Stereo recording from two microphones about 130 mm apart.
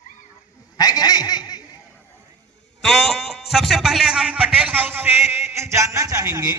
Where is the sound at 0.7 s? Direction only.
30° left (ahead or behind).